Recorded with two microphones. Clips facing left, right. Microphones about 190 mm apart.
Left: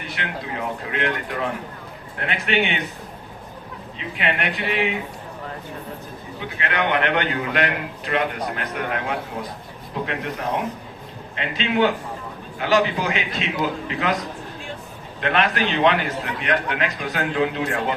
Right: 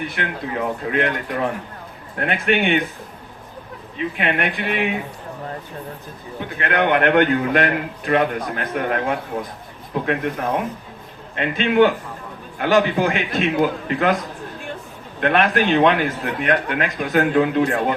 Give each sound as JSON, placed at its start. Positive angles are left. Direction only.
{"t": 0.2, "sound": "a man's voice", "side_deg": -50}
{"t": 3.9, "sound": "a man's voice", "side_deg": -55}
{"t": 6.6, "sound": "a man's voice", "side_deg": -50}
{"t": 15.2, "sound": "a man's voice", "side_deg": -50}